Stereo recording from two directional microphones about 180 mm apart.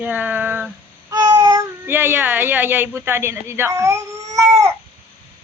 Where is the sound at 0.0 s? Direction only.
10° right (ahead or behind).